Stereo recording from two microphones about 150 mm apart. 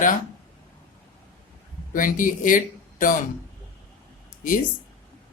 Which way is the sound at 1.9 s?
65° left (ahead or behind).